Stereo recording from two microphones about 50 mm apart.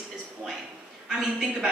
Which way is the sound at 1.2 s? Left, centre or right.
Centre.